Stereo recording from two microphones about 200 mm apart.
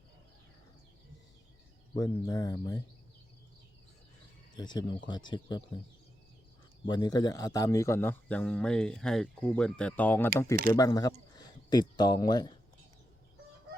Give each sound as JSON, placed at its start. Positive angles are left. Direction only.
{"t": 2.0, "sound": "speech", "side_deg": 20}
{"t": 4.5, "sound": "speech", "side_deg": 20}
{"t": 6.8, "sound": "speech", "side_deg": 20}